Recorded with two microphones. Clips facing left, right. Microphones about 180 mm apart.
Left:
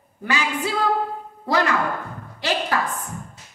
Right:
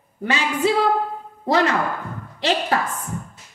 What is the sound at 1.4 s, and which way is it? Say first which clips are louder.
A woman's voice: right 2 dB; 20° right (ahead or behind).